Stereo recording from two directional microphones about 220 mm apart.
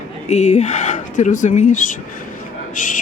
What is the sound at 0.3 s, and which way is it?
Speech, 30° left (ahead or behind).